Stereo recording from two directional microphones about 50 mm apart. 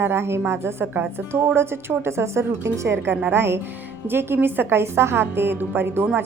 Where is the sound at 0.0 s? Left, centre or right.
Right.